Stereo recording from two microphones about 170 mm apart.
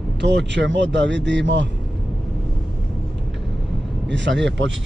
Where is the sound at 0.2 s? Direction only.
90° right.